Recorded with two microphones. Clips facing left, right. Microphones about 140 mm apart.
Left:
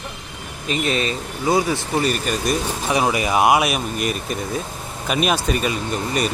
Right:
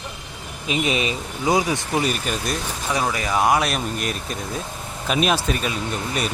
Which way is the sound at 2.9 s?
15° left (ahead or behind).